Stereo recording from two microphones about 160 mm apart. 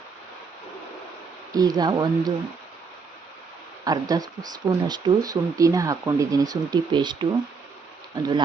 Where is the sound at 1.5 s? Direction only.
25° right (ahead or behind).